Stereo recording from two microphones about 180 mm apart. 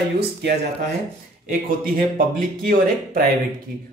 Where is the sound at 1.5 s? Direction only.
55° right (ahead or behind).